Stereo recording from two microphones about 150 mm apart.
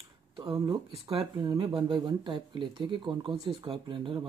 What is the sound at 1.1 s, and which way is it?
Speech, 25° right (ahead or behind).